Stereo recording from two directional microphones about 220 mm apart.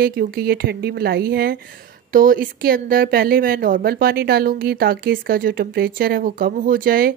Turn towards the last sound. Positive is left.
turn(degrees=-40)  # may be behind; listen again after turning